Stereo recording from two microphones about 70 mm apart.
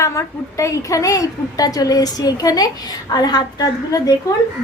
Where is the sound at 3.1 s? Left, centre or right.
Left.